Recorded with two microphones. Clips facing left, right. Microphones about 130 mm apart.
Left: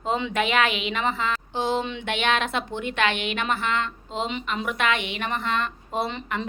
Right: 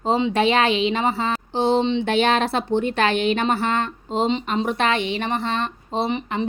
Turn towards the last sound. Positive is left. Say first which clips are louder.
# right 4 dB
turn(degrees=-20)  # may be behind; listen again after turning